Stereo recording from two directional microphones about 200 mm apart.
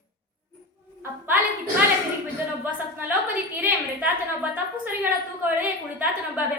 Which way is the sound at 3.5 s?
10° right (ahead or behind).